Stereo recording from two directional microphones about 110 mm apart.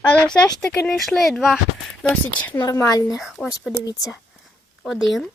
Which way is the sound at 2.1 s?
20° left (ahead or behind).